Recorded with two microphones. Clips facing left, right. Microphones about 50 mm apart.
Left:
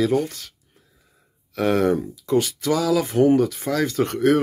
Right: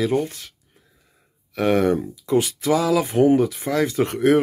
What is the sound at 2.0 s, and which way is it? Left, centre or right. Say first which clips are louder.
Speech: right 1 dB; centre.